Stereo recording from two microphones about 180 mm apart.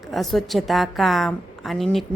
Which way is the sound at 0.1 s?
Centre (ahead or behind).